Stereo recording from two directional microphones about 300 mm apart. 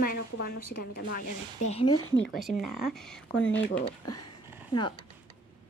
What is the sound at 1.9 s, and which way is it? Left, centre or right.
Speech, left.